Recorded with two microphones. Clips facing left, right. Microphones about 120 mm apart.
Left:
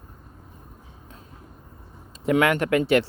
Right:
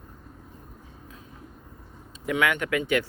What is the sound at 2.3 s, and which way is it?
Speech, 35° left (ahead or behind).